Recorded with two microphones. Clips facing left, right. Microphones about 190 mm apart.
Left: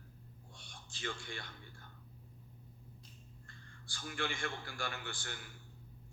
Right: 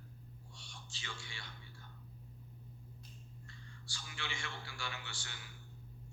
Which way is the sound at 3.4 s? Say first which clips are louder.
Right 2 dB; 50° left (ahead or behind).